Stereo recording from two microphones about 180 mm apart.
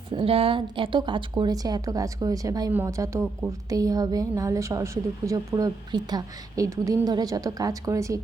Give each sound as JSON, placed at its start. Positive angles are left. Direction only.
{"t": 0.1, "sound": "a woman's voice", "side_deg": -30}